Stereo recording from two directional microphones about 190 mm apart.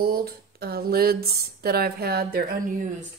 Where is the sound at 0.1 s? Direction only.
55° right (ahead or behind).